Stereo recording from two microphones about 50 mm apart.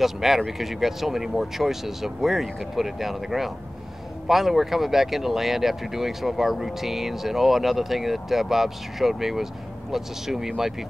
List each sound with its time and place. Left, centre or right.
0.0 s speech: centre